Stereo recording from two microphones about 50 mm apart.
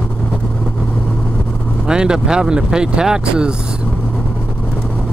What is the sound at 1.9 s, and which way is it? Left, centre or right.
Speech, centre.